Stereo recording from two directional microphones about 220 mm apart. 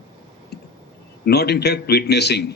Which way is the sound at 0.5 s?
50° left (ahead or behind).